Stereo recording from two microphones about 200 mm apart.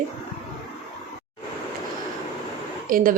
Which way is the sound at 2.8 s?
45° right (ahead or behind).